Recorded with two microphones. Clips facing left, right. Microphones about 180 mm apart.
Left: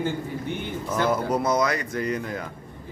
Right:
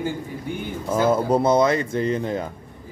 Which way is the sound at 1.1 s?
30° right (ahead or behind).